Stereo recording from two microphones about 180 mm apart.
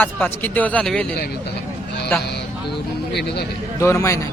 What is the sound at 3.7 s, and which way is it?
Speech, 15° left (ahead or behind).